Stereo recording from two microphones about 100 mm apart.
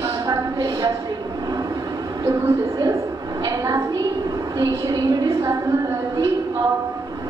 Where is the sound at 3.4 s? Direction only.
35° right (ahead or behind).